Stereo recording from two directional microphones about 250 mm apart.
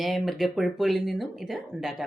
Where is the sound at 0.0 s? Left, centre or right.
Centre.